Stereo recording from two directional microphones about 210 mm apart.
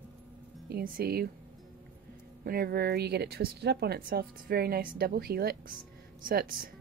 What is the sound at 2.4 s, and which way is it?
Speech, 45° right (ahead or behind).